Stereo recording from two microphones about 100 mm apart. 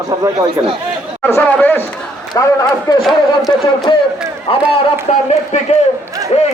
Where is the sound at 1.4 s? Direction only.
15° left (ahead or behind).